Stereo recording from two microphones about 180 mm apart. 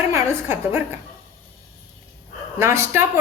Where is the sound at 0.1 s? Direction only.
15° right (ahead or behind).